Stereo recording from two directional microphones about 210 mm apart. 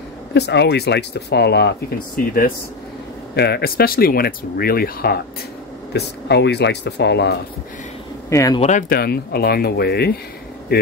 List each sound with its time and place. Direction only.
0.3 s speech: 55° left (ahead or behind)
8.3 s speech: 15° left (ahead or behind)
8.5 s speech: 35° left (ahead or behind); by 10.1 s 50° left (ahead or behind)